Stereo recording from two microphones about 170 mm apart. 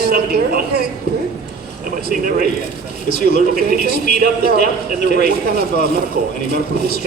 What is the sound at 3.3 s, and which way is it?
A man's voice, 65° right (ahead or behind).